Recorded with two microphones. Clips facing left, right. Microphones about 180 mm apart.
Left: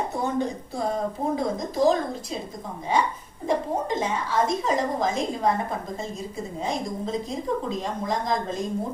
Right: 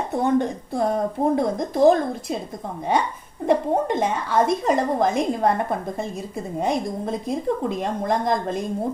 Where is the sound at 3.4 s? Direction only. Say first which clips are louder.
Right 5 dB; 60° right (ahead or behind).